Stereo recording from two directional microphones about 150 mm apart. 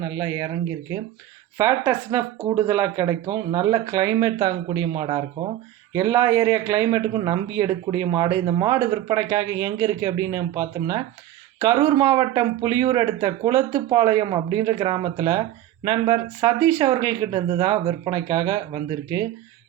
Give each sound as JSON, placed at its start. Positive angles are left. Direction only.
{"t": 0.0, "sound": "speech", "side_deg": -25}
{"t": 5.9, "sound": "speech", "side_deg": -20}